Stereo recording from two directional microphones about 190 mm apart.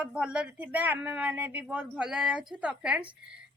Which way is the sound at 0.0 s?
5° right (ahead or behind).